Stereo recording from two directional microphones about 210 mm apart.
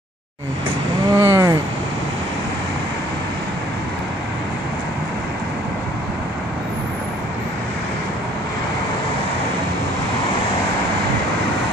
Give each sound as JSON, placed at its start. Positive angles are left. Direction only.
{"t": 1.1, "sound": "vehicle", "side_deg": -10}